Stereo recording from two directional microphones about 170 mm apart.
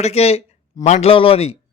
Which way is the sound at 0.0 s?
40° left (ahead or behind).